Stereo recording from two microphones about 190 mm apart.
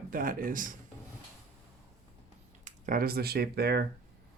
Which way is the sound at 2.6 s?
45° right (ahead or behind).